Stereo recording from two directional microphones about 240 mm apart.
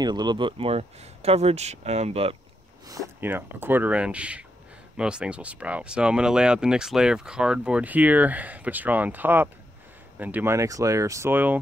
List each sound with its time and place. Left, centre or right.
0.0 s speech: centre
2.9 s speech: centre